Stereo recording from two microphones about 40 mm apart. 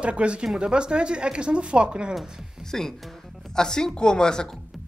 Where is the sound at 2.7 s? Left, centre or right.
Centre.